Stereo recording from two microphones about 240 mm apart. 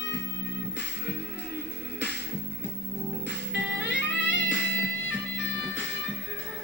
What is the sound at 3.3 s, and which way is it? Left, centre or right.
Music, left.